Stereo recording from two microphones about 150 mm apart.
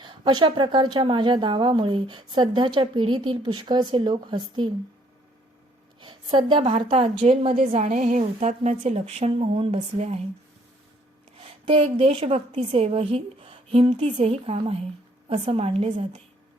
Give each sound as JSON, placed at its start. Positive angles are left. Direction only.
{"t": 0.0, "sound": "speech", "side_deg": -30}
{"t": 6.0, "sound": "a sound", "side_deg": -30}
{"t": 6.9, "sound": "speech", "side_deg": -40}
{"t": 7.7, "sound": "a woman's voice", "side_deg": -50}
{"t": 11.3, "sound": "a woman's voice", "side_deg": -35}